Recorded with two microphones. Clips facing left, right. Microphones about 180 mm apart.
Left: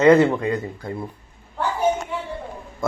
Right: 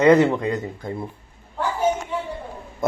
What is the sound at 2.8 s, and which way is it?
Speech, 20° right (ahead or behind).